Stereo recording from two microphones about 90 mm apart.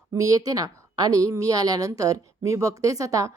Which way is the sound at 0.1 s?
40° right (ahead or behind).